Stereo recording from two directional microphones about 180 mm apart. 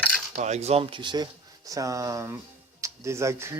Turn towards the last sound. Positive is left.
turn(degrees=-15)  # may be behind; listen again after turning